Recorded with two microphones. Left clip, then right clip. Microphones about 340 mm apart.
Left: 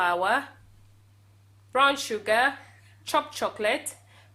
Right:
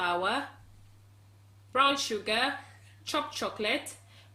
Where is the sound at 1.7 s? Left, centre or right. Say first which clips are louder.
Left 3 dB; centre.